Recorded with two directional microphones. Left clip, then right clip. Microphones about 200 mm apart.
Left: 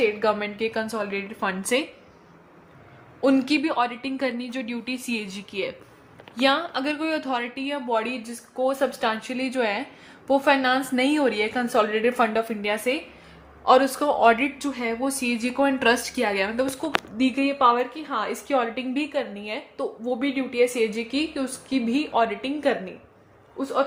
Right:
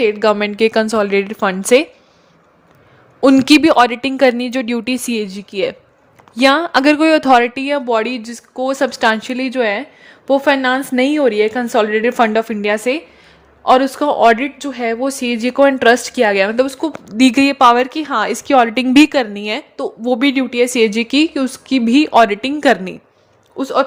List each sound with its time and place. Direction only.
0.0 s a woman's voice: 45° right (ahead or behind)
3.2 s a woman's voice: 50° right (ahead or behind)
17.2 s a woman's voice: 55° right (ahead or behind)